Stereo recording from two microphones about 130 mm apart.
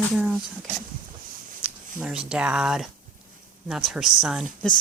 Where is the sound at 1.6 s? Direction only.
5° right (ahead or behind).